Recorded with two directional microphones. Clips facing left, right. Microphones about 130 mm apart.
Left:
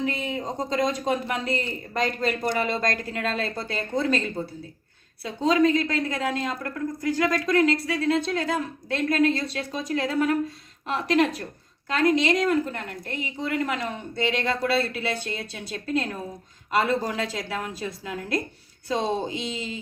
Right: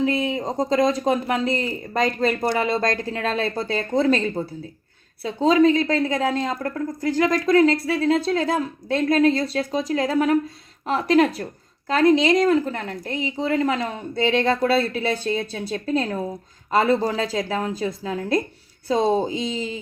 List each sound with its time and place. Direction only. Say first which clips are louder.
0.0 s a woman's voice: right 6 dB; 35° right (ahead or behind)